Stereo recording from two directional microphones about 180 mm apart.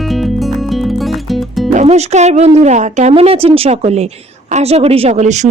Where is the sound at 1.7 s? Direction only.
40° right (ahead or behind).